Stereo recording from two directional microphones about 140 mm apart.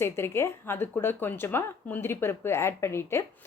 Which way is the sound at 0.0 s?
20° left (ahead or behind).